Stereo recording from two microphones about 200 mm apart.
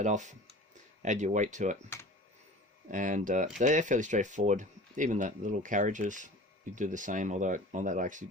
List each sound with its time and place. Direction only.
0.0 s speech: 35° right (ahead or behind)
2.9 s speech: 40° right (ahead or behind)